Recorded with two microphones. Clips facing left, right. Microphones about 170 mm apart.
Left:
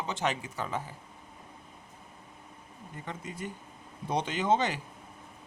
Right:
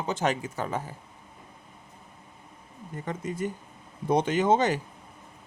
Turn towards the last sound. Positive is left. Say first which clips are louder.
# right 5 dB
turn(degrees=-45)  # may be behind; listen again after turning